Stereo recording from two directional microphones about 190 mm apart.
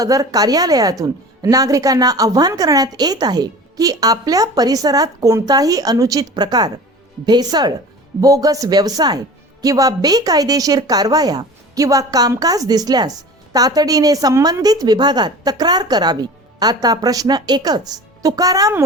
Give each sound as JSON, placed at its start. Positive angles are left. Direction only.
{"t": 0.0, "sound": "speech", "side_deg": -20}